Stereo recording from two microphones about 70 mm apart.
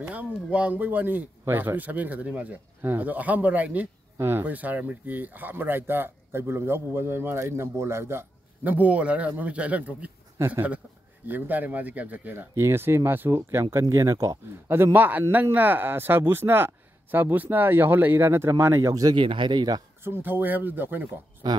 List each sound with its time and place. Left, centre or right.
0.3 s speech: centre; by 8.7 s right
8.7 s speech: right
12.5 s speech: right
14.7 s speech: right
18.9 s speech: right
20.0 s speech: right
21.4 s speech: right